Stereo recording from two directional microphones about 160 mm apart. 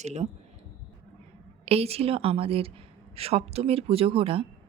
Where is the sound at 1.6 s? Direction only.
40° right (ahead or behind).